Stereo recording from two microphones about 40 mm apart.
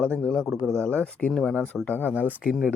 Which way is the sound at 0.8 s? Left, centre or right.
Left.